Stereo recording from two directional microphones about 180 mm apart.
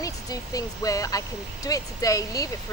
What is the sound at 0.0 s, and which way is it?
Speech, 20° left (ahead or behind).